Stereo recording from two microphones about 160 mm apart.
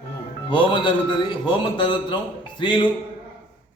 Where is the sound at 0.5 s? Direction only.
30° left (ahead or behind).